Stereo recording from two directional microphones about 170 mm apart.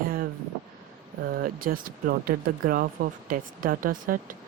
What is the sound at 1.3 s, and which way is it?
Speech, 55° right (ahead or behind).